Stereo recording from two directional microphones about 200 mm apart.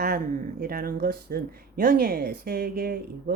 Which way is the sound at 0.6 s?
50° right (ahead or behind).